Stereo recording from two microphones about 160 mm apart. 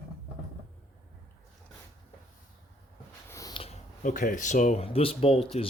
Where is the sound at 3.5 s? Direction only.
35° left (ahead or behind).